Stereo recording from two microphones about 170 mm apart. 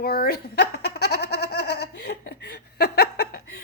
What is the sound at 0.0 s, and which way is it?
Giggle, 65° left (ahead or behind).